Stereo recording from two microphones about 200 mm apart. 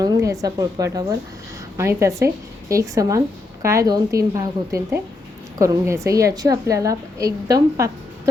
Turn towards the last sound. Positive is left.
turn(degrees=-15)  # may be behind; listen again after turning